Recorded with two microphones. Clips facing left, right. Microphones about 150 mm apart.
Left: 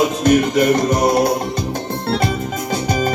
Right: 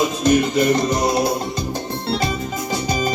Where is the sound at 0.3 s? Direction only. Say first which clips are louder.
Left 2 dB; 60° left (ahead or behind).